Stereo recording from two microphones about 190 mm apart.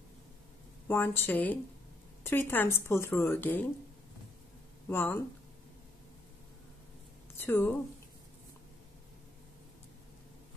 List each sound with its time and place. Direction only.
0.8 s a woman's voice: 10° left (ahead or behind)
4.8 s speech: 10° left (ahead or behind)
7.3 s a woman's voice: 10° left (ahead or behind)